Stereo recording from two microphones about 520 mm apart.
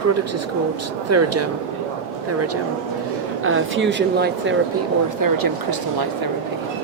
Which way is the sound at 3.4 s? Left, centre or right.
Right.